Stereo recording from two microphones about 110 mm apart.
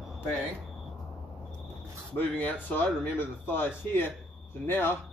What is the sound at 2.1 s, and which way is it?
A man's voice, 15° left (ahead or behind).